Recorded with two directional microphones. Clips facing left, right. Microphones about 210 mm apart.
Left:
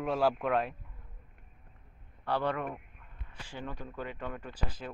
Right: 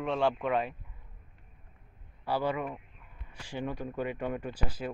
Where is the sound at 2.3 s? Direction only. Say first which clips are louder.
Right 1 dB; 5° right (ahead or behind).